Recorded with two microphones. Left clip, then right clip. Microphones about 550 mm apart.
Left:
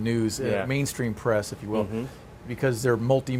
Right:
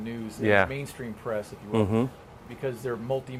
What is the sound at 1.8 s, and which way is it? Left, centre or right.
Speech, right.